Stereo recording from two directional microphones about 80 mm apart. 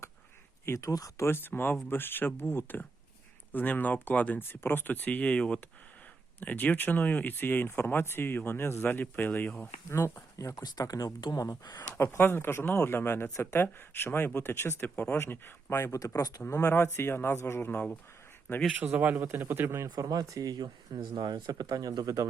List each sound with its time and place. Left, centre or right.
0.6 s speech: left
9.9 s speech: left
12.1 s speech: left
15.9 s speech: left
16.4 s speech: left
19.2 s a man's voice: right
19.8 s speech: right